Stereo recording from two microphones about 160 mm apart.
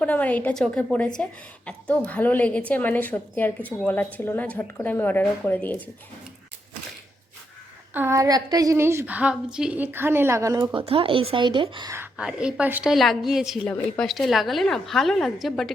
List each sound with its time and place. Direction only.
0.0 s a woman's voice: 10° left (ahead or behind)
7.9 s a woman's voice: 15° right (ahead or behind)
12.1 s a woman's voice: 5° right (ahead or behind)